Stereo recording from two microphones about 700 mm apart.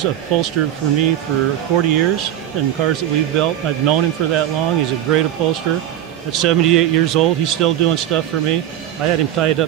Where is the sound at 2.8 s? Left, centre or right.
Right.